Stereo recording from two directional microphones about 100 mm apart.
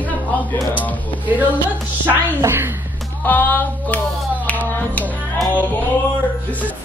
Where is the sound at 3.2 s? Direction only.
15° left (ahead or behind).